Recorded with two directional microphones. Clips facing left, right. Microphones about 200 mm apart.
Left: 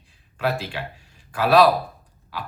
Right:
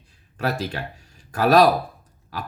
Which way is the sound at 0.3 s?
40° right (ahead or behind).